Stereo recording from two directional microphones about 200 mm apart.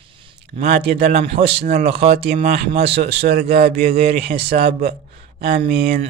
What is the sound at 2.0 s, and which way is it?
Speech, 35° right (ahead or behind).